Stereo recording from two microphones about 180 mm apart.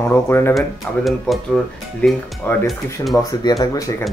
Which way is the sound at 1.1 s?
Centre (ahead or behind).